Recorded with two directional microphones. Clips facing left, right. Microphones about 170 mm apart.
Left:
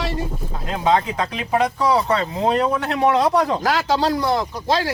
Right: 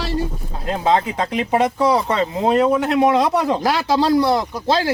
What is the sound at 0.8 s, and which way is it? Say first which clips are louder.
Speech: even; 30° right (ahead or behind).